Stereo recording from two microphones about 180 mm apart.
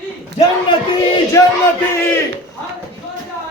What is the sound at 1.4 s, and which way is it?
Speech, 15° left (ahead or behind).